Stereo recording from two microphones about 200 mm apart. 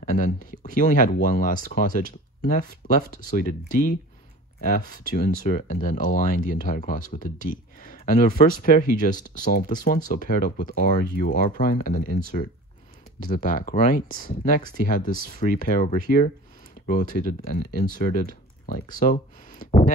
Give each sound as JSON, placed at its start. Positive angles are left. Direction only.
{"t": 0.2, "sound": "speech", "side_deg": 45}